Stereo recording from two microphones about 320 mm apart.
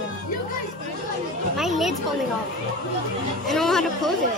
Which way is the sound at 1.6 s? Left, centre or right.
Centre.